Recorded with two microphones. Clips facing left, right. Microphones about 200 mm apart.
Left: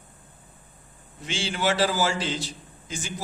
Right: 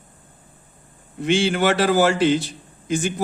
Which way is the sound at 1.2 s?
60° right (ahead or behind).